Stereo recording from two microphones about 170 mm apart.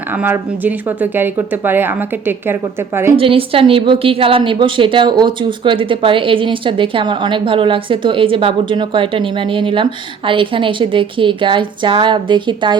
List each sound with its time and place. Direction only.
0.2 s speech: 10° right (ahead or behind)
3.2 s a woman's voice: 30° right (ahead or behind)